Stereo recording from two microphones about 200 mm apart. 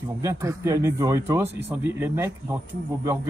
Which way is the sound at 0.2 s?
15° right (ahead or behind).